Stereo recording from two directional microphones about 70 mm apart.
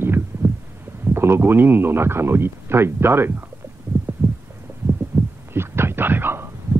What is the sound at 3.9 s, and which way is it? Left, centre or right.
Heart sounds, right.